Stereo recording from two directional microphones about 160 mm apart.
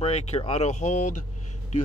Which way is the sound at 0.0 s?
40° left (ahead or behind).